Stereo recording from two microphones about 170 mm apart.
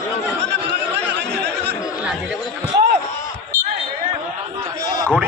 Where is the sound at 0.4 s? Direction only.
90° right.